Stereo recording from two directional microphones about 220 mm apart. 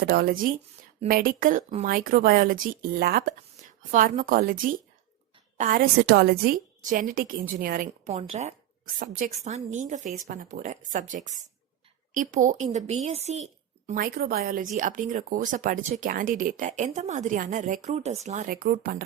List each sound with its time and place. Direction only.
0.0 s a woman's voice: 45° right (ahead or behind)